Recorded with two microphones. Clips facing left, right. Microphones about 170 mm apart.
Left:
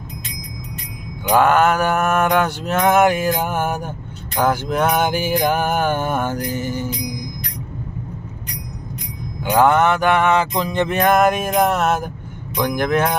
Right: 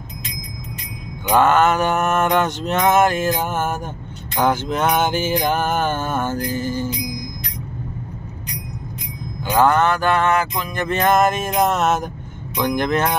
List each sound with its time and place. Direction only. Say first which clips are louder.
1.3 s mantra: left 1 dB; 10° left (ahead or behind)
9.4 s mantra: left 1 dB; 15° left (ahead or behind)
10.5 s music: left 5 dB; 30° left (ahead or behind)
10.9 s mantra: even; 10° left (ahead or behind)